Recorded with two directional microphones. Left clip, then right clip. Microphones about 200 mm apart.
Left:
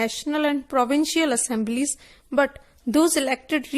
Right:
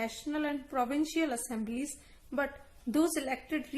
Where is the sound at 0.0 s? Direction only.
45° left (ahead or behind).